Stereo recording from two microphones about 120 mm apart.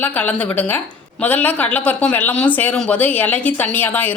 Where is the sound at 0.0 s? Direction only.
15° left (ahead or behind).